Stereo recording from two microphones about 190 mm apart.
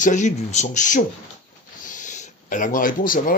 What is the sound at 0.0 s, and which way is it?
Speech, 40° left (ahead or behind).